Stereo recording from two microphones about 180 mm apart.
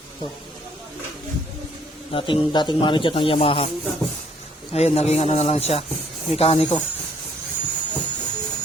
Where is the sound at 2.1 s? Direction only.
30° left (ahead or behind).